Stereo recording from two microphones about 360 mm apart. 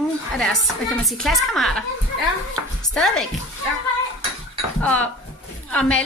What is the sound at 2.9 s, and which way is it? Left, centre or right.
Speech, centre.